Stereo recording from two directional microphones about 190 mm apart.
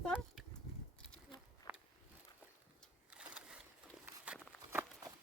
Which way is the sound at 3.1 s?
5° right (ahead or behind).